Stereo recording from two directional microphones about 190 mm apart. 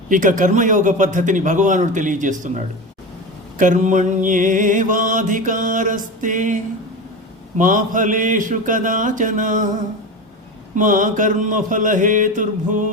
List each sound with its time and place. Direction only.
0.1 s a man's voice: 45° right (ahead or behind)
3.6 s music: 45° right (ahead or behind)
7.6 s music: 45° right (ahead or behind)
10.8 s music: 45° right (ahead or behind)